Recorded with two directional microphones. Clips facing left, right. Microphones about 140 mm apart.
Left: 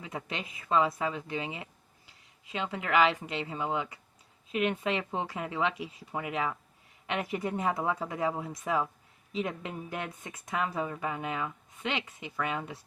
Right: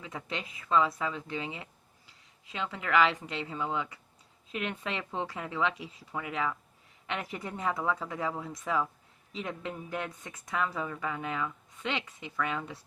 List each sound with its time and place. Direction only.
0.0 s speech: 15° left (ahead or behind)